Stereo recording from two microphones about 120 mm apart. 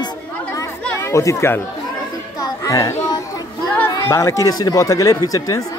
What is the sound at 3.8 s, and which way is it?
Speech, 25° left (ahead or behind).